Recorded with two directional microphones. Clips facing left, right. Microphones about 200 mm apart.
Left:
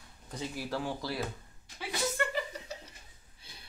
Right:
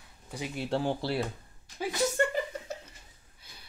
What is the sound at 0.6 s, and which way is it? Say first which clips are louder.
Speech: right 7 dB; 25° right (ahead or behind).